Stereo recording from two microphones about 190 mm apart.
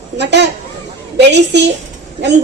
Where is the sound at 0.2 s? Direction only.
65° right (ahead or behind).